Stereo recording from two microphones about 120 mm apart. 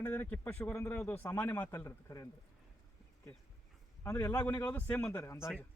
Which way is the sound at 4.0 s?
20° left (ahead or behind).